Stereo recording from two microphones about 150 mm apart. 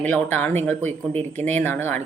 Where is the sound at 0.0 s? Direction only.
10° left (ahead or behind).